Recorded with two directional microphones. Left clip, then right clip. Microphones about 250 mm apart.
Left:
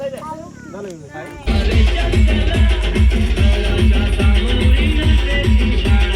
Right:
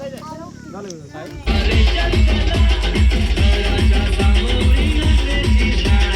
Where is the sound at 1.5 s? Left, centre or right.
Right.